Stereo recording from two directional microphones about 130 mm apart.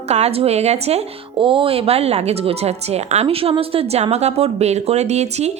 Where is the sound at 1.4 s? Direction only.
40° right (ahead or behind).